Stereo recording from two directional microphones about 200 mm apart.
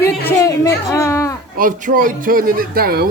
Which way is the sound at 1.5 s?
45° right (ahead or behind).